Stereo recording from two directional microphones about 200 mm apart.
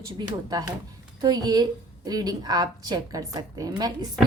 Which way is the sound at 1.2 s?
20° right (ahead or behind).